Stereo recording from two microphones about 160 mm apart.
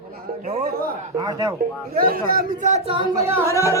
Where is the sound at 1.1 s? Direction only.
25° right (ahead or behind).